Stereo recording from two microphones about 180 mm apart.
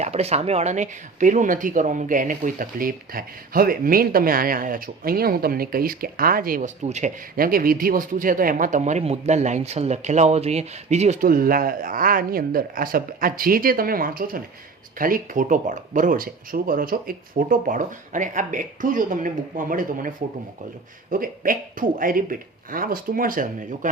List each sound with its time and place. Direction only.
0.0 s speech: 35° right (ahead or behind); by 6.7 s 50° right (ahead or behind)
6.8 s speech: 40° right (ahead or behind)